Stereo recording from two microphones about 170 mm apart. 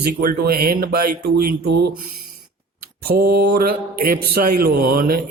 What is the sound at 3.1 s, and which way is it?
A man's voice, 70° right (ahead or behind).